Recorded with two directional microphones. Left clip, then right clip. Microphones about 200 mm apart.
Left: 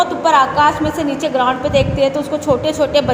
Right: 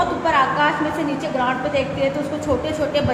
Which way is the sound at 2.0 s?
30° left (ahead or behind).